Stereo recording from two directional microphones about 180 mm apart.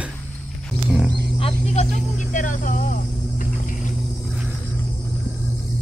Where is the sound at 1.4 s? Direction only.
35° left (ahead or behind).